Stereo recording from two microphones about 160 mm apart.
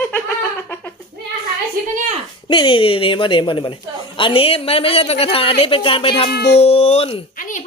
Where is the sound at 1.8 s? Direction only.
60° right (ahead or behind).